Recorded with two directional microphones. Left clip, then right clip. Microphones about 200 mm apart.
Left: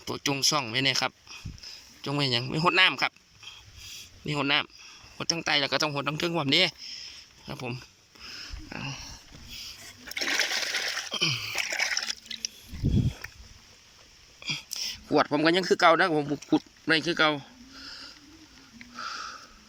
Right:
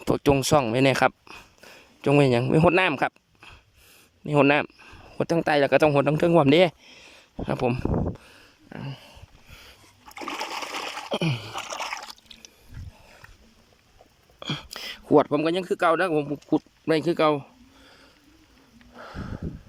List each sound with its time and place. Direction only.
0.0 s speech: 45° right (ahead or behind)
10.2 s water: 20° right (ahead or behind)
11.1 s splash: 50° right (ahead or behind)
14.3 s a sound: 55° right (ahead or behind)
15.0 s speech: 35° right (ahead or behind)
15.3 s speech: 15° right (ahead or behind)
18.9 s sniff: 40° right (ahead or behind)